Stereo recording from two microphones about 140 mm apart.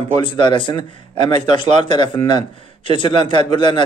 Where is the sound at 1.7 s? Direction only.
55° right (ahead or behind).